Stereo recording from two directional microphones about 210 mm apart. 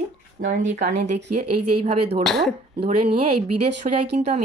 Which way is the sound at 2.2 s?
Centre (ahead or behind).